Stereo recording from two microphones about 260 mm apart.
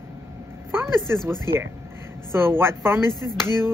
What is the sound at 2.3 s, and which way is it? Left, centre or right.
Speech, centre.